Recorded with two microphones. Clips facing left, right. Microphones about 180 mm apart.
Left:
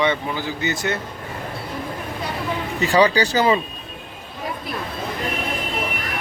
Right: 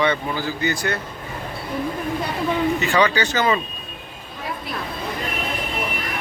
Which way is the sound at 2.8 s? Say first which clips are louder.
Left 3 dB; 35° left (ahead or behind).